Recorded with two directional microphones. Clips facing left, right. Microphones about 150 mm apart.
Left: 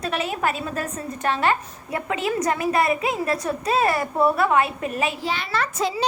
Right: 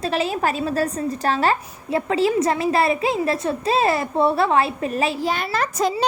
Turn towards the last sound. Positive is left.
turn(degrees=-45)  # may be behind; listen again after turning